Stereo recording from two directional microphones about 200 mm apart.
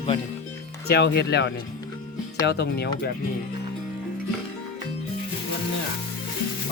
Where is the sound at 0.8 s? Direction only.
55° left (ahead or behind).